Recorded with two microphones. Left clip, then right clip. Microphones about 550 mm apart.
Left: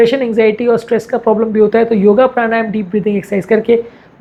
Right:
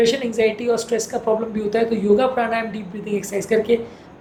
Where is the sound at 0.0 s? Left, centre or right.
Left.